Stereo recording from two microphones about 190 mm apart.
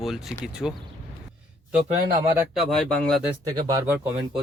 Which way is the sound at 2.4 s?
Centre (ahead or behind).